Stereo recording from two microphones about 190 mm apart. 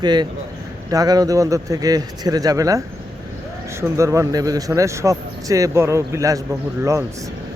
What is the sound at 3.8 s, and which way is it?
Speech, 15° right (ahead or behind).